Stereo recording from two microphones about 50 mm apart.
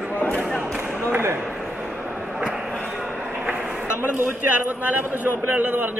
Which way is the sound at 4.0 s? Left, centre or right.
Right.